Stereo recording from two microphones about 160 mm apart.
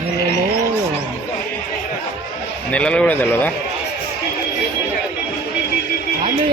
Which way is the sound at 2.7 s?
5° left (ahead or behind).